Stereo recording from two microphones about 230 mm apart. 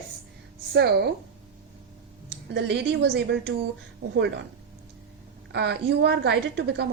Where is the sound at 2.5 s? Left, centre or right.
Right.